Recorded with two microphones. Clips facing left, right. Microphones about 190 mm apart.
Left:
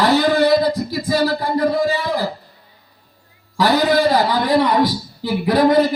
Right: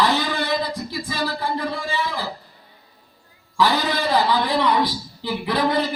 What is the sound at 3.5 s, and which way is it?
A man's voice, 45° left (ahead or behind).